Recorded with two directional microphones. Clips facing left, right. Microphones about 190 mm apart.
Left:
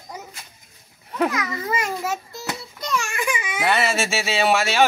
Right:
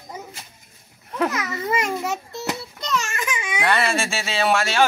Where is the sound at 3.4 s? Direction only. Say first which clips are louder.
Right 1 dB; 5° left (ahead or behind).